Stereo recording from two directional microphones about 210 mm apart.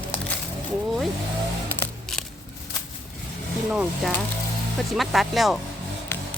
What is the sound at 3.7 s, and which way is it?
Speech, 5° right (ahead or behind).